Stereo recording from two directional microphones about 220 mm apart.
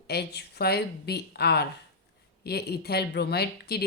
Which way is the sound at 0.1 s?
50° left (ahead or behind).